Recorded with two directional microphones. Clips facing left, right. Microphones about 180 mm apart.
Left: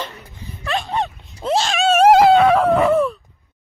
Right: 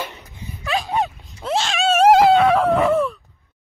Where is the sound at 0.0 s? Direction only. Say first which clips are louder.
Even; 15° right (ahead or behind).